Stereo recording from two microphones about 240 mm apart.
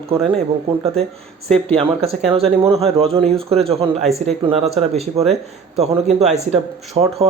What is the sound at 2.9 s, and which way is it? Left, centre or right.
A man's voice, right.